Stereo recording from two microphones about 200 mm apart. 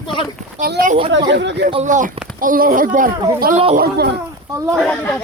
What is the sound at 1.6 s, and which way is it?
A woman's voice, 35° right (ahead or behind).